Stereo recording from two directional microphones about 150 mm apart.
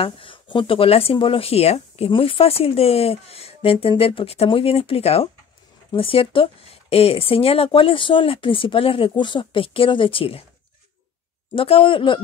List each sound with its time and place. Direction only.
0.0 s speech: 35° left (ahead or behind)
11.5 s speech: 40° left (ahead or behind)